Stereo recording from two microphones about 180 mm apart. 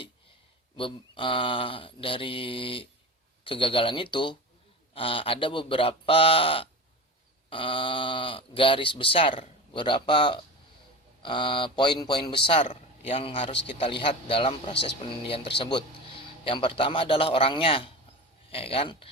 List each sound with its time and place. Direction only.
0.8 s speech: 30° left (ahead or behind)